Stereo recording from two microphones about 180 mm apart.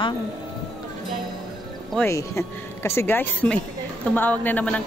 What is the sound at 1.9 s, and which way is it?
A woman's voice, 15° left (ahead or behind).